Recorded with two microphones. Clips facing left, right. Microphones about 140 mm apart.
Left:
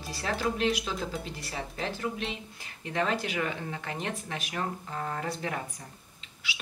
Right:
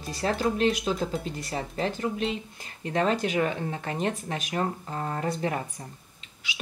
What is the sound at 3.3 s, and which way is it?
Speech, 35° right (ahead or behind).